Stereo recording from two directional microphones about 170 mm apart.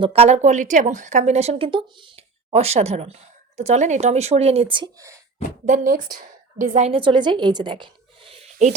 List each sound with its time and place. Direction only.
0.0 s speech: 35° right (ahead or behind)
5.6 s a woman's voice: 50° right (ahead or behind); by 8.4 s 30° right (ahead or behind)